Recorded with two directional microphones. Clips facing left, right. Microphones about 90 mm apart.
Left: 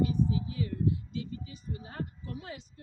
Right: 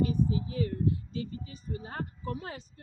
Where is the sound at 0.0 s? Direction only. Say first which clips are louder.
Right 1 dB; 40° right (ahead or behind).